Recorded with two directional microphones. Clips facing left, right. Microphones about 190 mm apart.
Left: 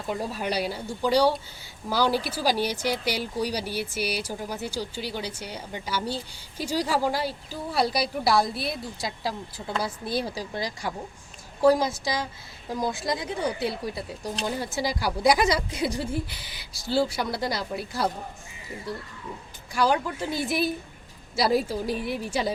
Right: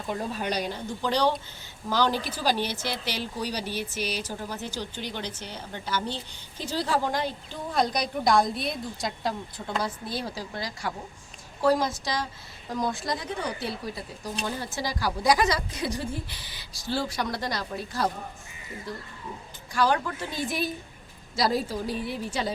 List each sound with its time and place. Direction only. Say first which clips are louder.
0.1 s speech: left 1 dB; 5° left (ahead or behind)
11.6 s speech: left 3 dB; 10° left (ahead or behind)
14.4 s speech: left 4 dB; 10° left (ahead or behind)
19.7 s speech: left 1 dB; 10° left (ahead or behind)